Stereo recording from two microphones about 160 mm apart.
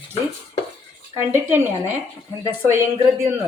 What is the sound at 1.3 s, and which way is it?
Speech, 15° right (ahead or behind).